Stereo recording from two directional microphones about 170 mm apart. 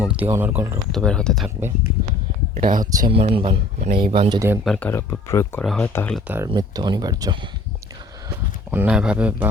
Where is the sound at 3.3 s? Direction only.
30° right (ahead or behind).